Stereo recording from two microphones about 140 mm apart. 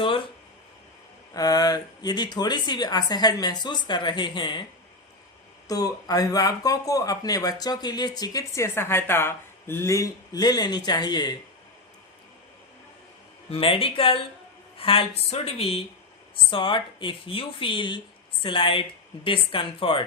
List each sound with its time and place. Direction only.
1.3 s speech: 25° left (ahead or behind)
5.6 s speech: 25° left (ahead or behind)
13.5 s a woman's voice: 40° left (ahead or behind)